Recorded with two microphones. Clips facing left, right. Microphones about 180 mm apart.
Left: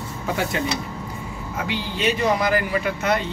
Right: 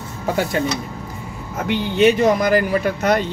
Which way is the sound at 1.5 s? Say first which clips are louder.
Right 7 dB; 50° right (ahead or behind).